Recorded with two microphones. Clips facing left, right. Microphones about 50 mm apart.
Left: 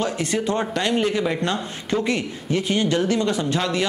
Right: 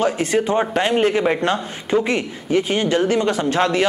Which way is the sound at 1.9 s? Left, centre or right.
Centre.